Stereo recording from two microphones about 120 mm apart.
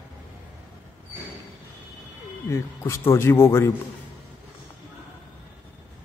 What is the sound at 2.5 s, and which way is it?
A man's voice, 20° left (ahead or behind).